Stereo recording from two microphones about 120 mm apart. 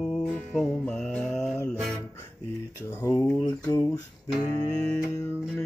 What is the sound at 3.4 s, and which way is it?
Mantra, 30° left (ahead or behind).